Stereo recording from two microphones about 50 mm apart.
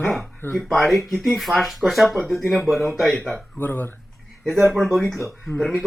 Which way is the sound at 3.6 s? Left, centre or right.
Left.